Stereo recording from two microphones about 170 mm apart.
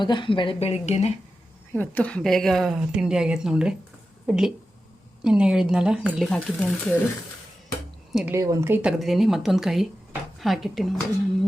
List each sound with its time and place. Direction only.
0.0 s a woman's voice: 25° left (ahead or behind)
1.7 s a woman's voice: 10° left (ahead or behind)
8.1 s a woman's voice: 10° right (ahead or behind)